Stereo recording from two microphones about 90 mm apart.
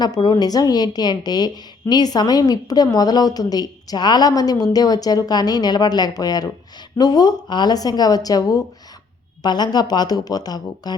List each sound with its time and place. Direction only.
0.0 s a woman's voice: 50° left (ahead or behind)